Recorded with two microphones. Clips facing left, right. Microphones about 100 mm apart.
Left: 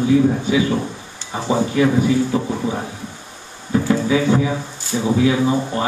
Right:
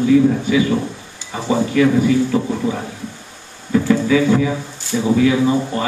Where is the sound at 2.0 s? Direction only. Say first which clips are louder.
Right 2 dB; 15° left (ahead or behind).